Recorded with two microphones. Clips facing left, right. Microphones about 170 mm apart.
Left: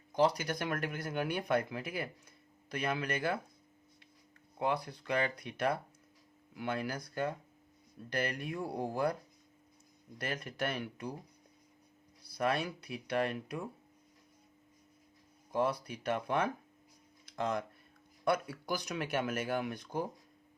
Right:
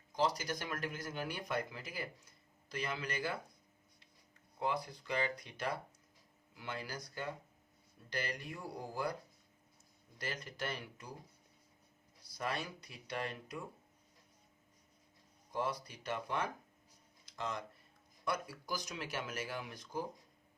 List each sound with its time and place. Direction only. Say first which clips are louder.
0.1 s speech: left 5 dB; 60° left (ahead or behind)
4.6 s speech: left 4 dB; 65° left (ahead or behind)
10.2 s speech: left 5 dB; 60° left (ahead or behind)
12.3 s speech: left 7 dB; 60° left (ahead or behind)
15.5 s speech: left 6 dB; 60° left (ahead or behind)